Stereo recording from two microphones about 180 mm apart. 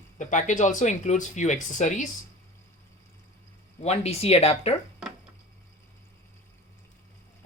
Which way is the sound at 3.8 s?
35° left (ahead or behind).